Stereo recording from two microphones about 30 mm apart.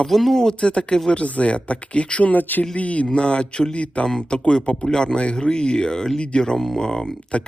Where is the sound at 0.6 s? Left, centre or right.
Left.